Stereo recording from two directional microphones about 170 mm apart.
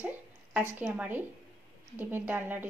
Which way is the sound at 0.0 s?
10° right (ahead or behind).